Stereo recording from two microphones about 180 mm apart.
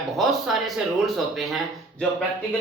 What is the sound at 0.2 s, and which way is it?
Speech, centre (ahead or behind).